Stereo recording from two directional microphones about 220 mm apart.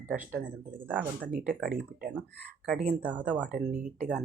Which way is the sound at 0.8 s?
5° left (ahead or behind).